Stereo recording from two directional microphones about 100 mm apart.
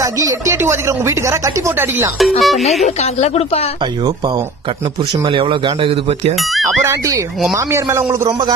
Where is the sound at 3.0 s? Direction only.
90° left.